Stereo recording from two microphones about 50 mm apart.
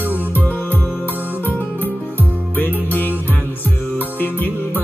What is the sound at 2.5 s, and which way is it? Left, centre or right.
Music, left.